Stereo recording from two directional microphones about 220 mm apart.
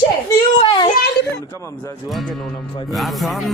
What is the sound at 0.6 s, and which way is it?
Speech, 20° left (ahead or behind).